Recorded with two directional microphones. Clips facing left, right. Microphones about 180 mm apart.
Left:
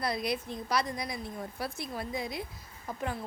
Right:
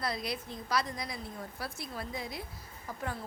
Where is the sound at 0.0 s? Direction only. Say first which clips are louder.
Left 4 dB; 15° left (ahead or behind).